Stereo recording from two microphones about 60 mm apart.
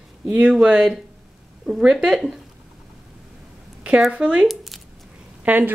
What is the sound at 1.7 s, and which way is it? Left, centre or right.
Speech, centre.